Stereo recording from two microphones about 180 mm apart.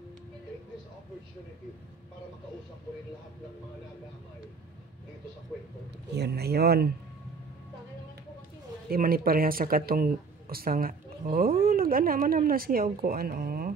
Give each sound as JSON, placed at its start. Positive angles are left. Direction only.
{"t": 6.1, "sound": "speech", "side_deg": -65}
{"t": 8.8, "sound": "speech", "side_deg": -55}